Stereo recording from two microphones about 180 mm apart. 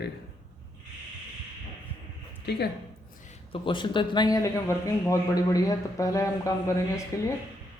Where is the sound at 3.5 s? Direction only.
25° left (ahead or behind).